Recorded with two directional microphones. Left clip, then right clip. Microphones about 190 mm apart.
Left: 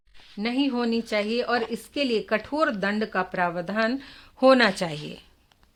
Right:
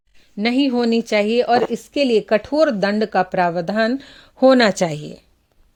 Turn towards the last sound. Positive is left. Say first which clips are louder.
# right 6 dB
turn(degrees=-35)  # may be behind; listen again after turning